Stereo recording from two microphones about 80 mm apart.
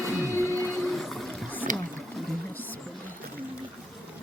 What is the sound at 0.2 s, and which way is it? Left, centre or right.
Printer, left.